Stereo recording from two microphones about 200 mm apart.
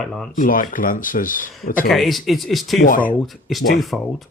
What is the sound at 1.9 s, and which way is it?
Speech, centre (ahead or behind).